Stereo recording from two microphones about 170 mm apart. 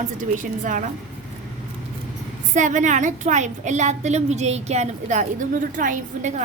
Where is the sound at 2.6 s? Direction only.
45° right (ahead or behind).